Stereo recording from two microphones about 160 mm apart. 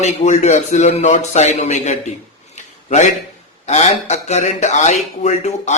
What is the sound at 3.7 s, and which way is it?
A man's voice, 45° left (ahead or behind).